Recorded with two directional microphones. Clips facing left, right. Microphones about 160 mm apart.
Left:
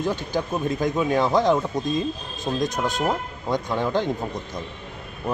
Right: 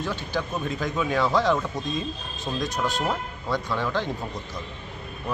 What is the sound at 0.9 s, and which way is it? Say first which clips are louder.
Speech: left 4 dB; 35° left (ahead or behind).